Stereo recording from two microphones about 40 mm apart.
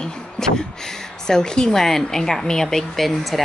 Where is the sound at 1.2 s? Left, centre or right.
Centre.